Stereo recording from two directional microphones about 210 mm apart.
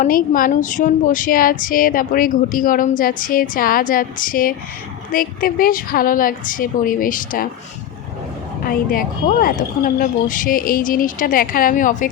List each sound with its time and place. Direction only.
0.0 s speech: 40° left (ahead or behind)
8.6 s speech: 45° left (ahead or behind)